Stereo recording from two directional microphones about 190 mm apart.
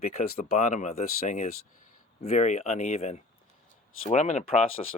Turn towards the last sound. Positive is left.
turn(degrees=35)  # may be behind; listen again after turning